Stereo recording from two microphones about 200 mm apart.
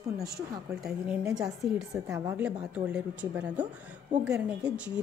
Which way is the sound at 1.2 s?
20° right (ahead or behind).